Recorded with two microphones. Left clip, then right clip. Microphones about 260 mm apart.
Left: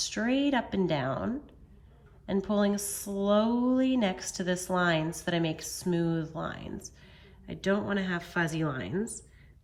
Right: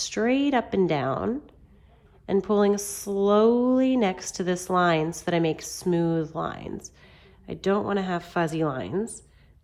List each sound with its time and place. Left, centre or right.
0.3 s speech: right